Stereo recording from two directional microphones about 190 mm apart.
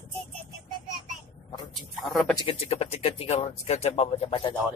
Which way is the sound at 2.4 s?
30° left (ahead or behind).